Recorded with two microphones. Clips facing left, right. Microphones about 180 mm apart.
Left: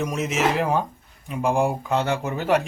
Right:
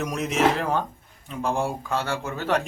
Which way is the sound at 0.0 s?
Centre (ahead or behind).